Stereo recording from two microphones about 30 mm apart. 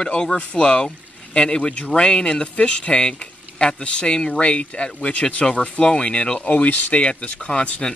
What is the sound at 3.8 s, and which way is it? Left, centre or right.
Speech, left.